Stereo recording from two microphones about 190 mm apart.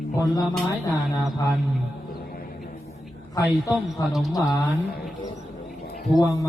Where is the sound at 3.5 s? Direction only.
Centre (ahead or behind).